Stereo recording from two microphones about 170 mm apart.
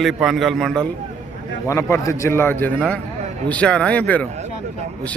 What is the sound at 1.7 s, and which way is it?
A man's voice, 15° left (ahead or behind).